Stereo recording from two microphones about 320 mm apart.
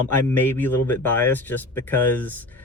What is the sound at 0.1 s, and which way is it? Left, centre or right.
Speech, centre.